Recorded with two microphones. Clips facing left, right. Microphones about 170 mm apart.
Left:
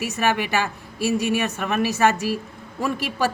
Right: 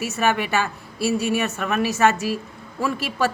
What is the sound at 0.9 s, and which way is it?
Speech, 15° left (ahead or behind).